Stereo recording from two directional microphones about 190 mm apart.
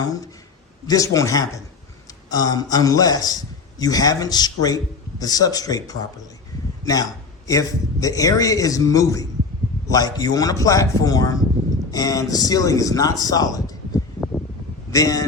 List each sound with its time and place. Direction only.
0.9 s a man's voice: 15° left (ahead or behind)
14.9 s a man's voice: 20° left (ahead or behind)